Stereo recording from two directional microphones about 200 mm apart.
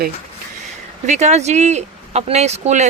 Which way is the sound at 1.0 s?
35° right (ahead or behind).